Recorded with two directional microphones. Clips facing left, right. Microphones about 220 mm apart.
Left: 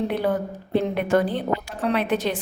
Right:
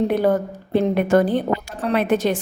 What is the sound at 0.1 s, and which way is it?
A woman's voice, 45° right (ahead or behind).